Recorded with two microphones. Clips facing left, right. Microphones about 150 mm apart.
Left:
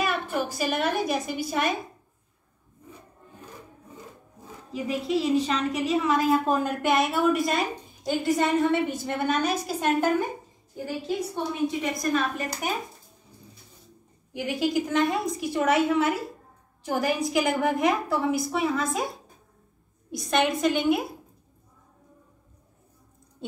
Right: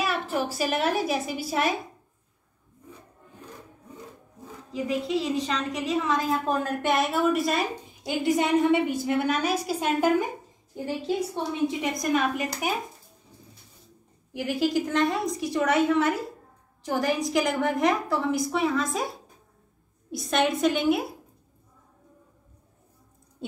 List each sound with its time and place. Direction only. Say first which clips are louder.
0.0 s a woman's voice: even; 5° right (ahead or behind)
4.8 s a woman's voice: left 1 dB; 5° left (ahead or behind)
8.0 s a woman's voice: even; 15° right (ahead or behind)
10.9 s a woman's voice: right 2 dB; 25° right (ahead or behind)
12.1 s a woman's voice: right 2 dB; 15° right (ahead or behind)
14.3 s a woman's voice: right 1 dB; centre (ahead or behind)
20.1 s a woman's voice: even; centre (ahead or behind)